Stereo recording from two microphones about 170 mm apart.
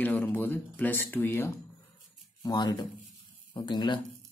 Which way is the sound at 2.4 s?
25° left (ahead or behind).